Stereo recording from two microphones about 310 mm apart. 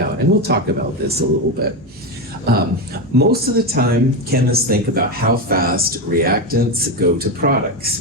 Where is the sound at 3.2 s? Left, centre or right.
Right.